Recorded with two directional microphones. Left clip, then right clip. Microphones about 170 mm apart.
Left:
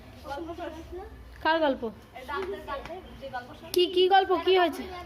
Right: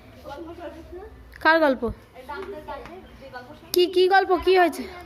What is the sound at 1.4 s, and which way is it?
Speech, 40° right (ahead or behind).